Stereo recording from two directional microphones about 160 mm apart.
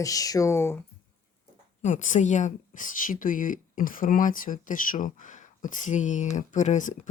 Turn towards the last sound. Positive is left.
turn(degrees=50)  # may be behind; listen again after turning